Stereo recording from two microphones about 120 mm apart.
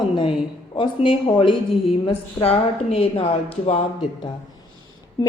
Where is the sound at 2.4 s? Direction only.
55° left (ahead or behind).